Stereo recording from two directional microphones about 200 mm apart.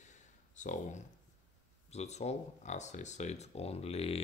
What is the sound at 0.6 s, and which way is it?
Speech, 40° left (ahead or behind).